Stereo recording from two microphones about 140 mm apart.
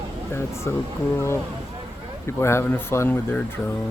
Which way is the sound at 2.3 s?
20° left (ahead or behind).